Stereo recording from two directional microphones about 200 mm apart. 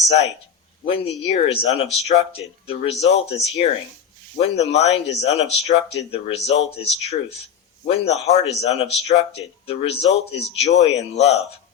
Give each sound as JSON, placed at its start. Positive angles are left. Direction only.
{"t": 0.9, "sound": "speech", "side_deg": 30}